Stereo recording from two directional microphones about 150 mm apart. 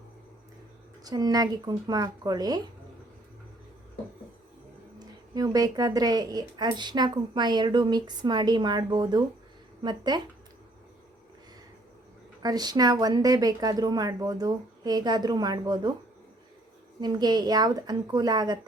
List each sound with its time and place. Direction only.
1.0 s speech: 25° right (ahead or behind)
4.9 s speech: 25° right (ahead or behind)
12.4 s speech: 25° right (ahead or behind)
17.0 s speech: 25° right (ahead or behind)